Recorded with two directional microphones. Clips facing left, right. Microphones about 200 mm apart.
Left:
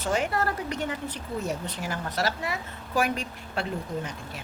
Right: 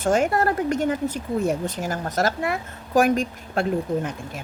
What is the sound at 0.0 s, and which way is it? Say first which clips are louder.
Speech: right 7 dB; 45° right (ahead or behind).